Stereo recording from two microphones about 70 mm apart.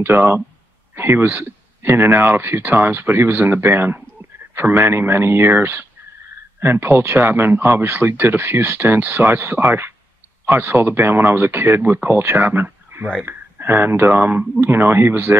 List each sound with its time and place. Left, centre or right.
0.0 s speech: right